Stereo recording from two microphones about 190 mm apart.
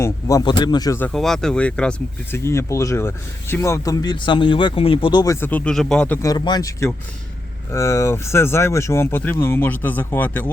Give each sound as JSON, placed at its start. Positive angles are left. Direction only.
{"t": 0.0, "sound": "speech", "side_deg": 20}
{"t": 6.2, "sound": "speech", "side_deg": 20}